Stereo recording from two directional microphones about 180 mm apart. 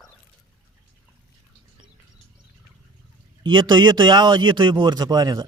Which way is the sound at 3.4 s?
25° right (ahead or behind).